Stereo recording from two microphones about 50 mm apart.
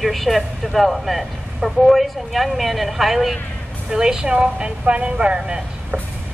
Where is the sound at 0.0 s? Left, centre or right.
Centre.